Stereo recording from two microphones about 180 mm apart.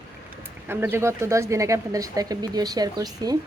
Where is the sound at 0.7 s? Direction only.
10° right (ahead or behind).